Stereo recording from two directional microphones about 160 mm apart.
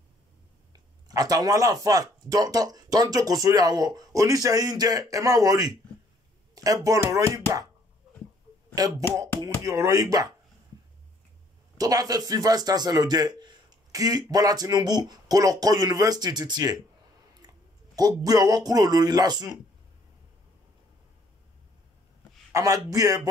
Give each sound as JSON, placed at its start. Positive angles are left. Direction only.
{"t": 0.7, "sound": "a man's voice", "side_deg": -25}
{"t": 8.7, "sound": "a man's voice", "side_deg": -20}
{"t": 11.8, "sound": "a man's voice", "side_deg": -25}
{"t": 17.9, "sound": "a man's voice", "side_deg": -25}
{"t": 22.5, "sound": "a man's voice", "side_deg": -20}